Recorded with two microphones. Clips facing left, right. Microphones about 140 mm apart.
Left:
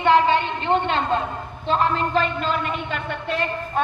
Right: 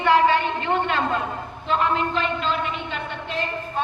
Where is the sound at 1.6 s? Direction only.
35° left (ahead or behind).